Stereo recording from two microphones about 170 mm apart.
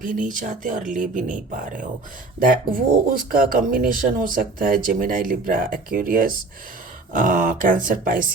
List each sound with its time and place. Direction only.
0.0 s speech: 50° right (ahead or behind)